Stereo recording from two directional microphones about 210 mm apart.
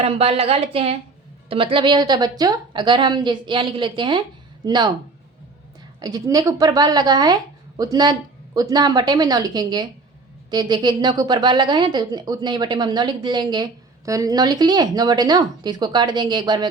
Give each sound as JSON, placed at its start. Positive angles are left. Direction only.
{"t": 0.0, "sound": "a woman's voice", "side_deg": -30}
{"t": 6.0, "sound": "a woman's voice", "side_deg": -15}